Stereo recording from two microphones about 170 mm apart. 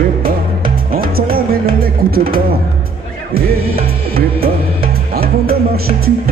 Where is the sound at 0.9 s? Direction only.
60° right (ahead or behind).